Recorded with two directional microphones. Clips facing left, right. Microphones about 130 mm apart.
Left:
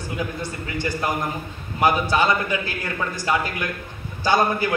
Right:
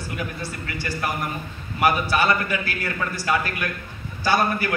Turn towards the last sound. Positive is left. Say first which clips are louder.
# left 2 dB
turn(degrees=20)  # may be behind; listen again after turning